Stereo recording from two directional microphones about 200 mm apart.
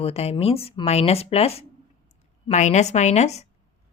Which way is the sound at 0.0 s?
30° left (ahead or behind).